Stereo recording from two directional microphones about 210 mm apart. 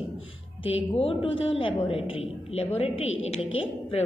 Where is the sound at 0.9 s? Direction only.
25° left (ahead or behind).